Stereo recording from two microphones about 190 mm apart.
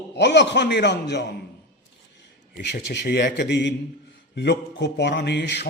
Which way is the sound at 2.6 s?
65° left (ahead or behind).